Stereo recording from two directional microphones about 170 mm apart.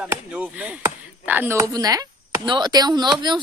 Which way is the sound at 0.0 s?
10° right (ahead or behind).